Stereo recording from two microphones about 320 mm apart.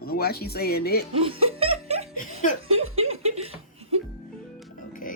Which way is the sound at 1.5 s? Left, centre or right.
Centre.